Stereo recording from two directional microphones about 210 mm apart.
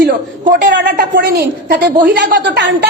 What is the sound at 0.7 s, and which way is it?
A woman's voice, 55° right (ahead or behind).